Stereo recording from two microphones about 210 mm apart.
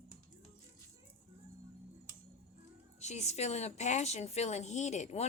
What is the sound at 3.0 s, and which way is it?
Speech, 30° left (ahead or behind).